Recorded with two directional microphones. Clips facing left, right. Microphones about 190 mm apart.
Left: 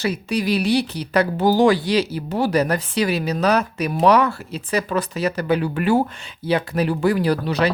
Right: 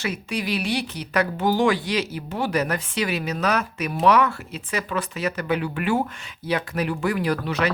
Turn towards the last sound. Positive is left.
turn(degrees=35)  # may be behind; listen again after turning